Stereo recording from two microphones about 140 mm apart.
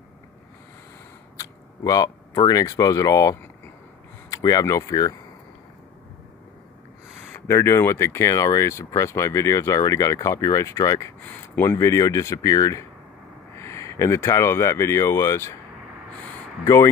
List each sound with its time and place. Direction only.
1.3 s speech: 25° left (ahead or behind)
7.3 s speech: 20° left (ahead or behind)
16.6 s speech: 20° left (ahead or behind)